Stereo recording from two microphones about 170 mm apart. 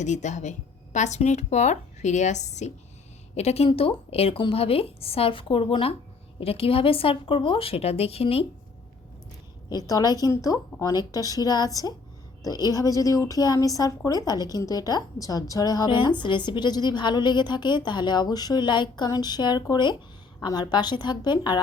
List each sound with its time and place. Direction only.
0.0 s a woman's voice: 45° left (ahead or behind)
9.6 s a woman's voice: 20° left (ahead or behind)